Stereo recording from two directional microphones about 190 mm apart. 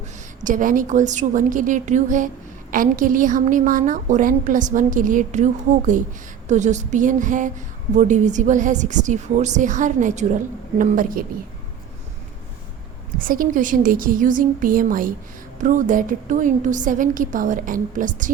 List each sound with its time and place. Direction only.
0.4 s a woman's voice: 45° right (ahead or behind)
13.1 s a woman's voice: 45° right (ahead or behind)